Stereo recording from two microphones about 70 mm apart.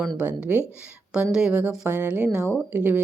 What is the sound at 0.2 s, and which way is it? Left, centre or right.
Speech, right.